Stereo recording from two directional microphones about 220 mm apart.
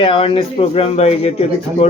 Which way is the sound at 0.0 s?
25° left (ahead or behind).